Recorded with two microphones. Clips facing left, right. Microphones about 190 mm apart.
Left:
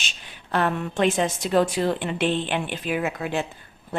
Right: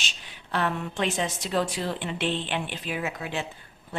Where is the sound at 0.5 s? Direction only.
50° left (ahead or behind).